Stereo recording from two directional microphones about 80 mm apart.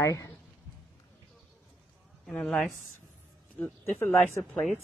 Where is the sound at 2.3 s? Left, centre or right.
Centre.